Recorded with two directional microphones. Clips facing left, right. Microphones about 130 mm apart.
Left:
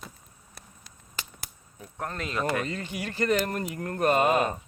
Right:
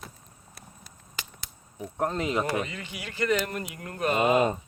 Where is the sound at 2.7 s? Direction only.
40° left (ahead or behind).